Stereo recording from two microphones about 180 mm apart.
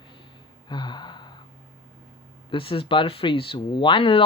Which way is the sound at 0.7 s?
25° left (ahead or behind).